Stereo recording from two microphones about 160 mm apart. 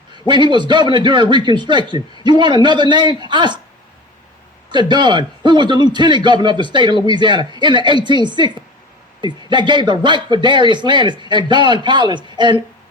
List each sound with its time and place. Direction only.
0.1 s a man's voice: 30° right (ahead or behind)
4.7 s a man's voice: 30° right (ahead or behind)